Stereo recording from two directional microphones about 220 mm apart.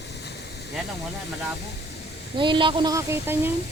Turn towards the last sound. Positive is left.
turn(degrees=-10)  # may be behind; listen again after turning